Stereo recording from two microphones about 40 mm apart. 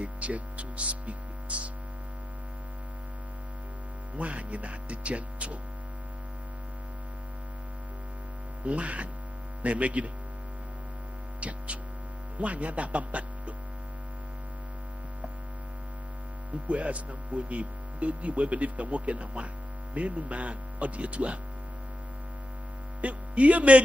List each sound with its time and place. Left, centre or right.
0.0 s hum: right
4.2 s hum: right
8.6 s hum: right
11.4 s hum: right
16.6 s hum: right
22.9 s speech: right